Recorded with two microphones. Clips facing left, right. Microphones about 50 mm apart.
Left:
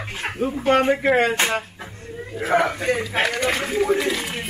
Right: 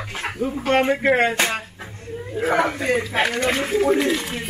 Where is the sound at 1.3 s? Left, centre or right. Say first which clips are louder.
Even; centre.